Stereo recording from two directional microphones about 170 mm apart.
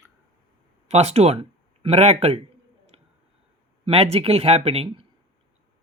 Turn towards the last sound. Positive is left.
turn(degrees=-35)  # may be behind; listen again after turning